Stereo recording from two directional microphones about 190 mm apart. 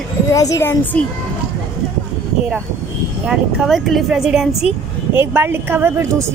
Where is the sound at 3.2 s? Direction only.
5° right (ahead or behind).